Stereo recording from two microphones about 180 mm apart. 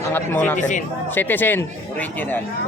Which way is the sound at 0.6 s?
45° left (ahead or behind).